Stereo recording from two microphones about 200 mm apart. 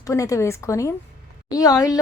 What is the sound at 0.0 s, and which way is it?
Speech, 15° left (ahead or behind).